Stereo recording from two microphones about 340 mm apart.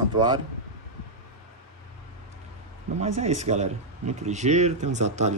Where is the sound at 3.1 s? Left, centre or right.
Centre.